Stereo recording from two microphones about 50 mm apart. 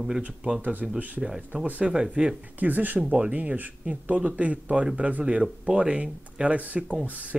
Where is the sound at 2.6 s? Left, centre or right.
Right.